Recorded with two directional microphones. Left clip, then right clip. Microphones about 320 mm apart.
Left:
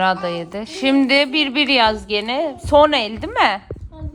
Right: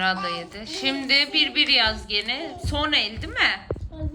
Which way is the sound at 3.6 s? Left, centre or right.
Centre.